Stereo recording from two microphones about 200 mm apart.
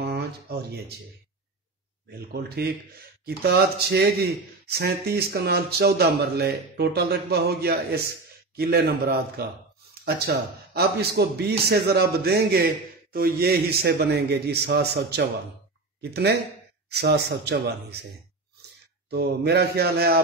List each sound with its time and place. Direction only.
0.0 s speech: 55° right (ahead or behind)
2.0 s a man's voice: 50° right (ahead or behind)
19.0 s a man's voice: 55° right (ahead or behind)